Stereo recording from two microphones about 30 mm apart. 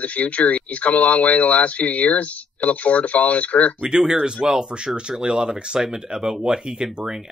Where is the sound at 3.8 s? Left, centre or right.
Right.